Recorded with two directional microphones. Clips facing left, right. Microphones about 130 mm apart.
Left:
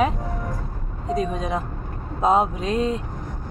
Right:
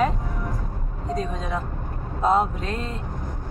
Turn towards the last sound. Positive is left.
turn(degrees=15)  # may be behind; listen again after turning